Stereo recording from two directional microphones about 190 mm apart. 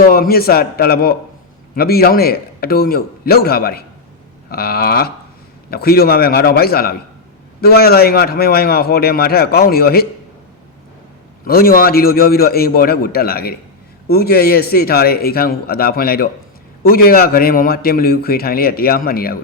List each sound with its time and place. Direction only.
0.1 s a man's voice: 55° left (ahead or behind)
11.4 s a man's voice: 50° left (ahead or behind)